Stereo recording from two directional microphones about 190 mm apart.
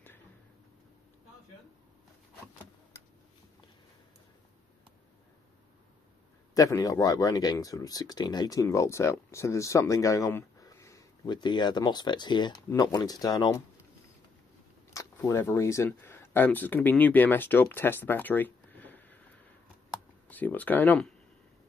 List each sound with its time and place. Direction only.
6.5 s speech: 20° left (ahead or behind)
14.9 s speech: 15° left (ahead or behind)
20.2 s speech: 10° left (ahead or behind)